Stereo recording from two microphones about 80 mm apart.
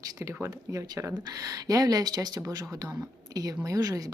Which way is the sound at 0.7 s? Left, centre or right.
Right.